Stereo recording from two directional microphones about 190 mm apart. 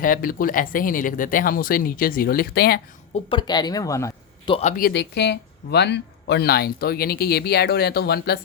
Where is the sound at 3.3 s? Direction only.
20° left (ahead or behind).